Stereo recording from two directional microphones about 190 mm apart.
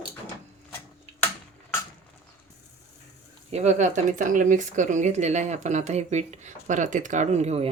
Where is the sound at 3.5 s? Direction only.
40° right (ahead or behind).